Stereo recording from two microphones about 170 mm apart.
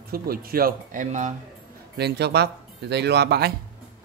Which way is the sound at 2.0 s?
75° right (ahead or behind).